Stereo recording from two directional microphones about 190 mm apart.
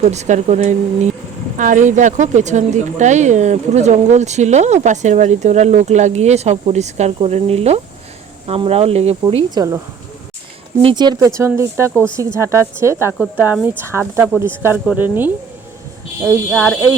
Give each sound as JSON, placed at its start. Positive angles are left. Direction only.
{"t": 0.0, "sound": "speech", "side_deg": -35}
{"t": 9.2, "sound": "speech", "side_deg": -20}
{"t": 10.8, "sound": "speech", "side_deg": -20}
{"t": 16.5, "sound": "speech", "side_deg": 5}